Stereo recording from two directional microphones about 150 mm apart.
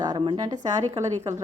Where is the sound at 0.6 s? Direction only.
50° right (ahead or behind).